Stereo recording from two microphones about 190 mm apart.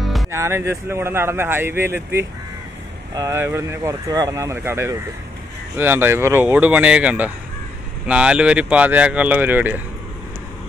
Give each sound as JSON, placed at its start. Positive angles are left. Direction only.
{"t": 0.0, "sound": "music", "side_deg": 0}
{"t": 0.3, "sound": "speech", "side_deg": -15}